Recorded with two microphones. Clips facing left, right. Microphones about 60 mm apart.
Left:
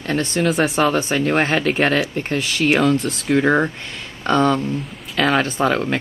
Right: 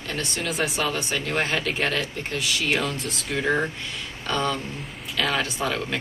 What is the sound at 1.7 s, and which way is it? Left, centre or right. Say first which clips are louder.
Speech: left 8 dB; left.